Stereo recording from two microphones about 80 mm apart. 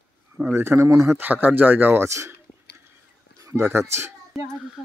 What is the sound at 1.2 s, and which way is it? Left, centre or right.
Speech, right.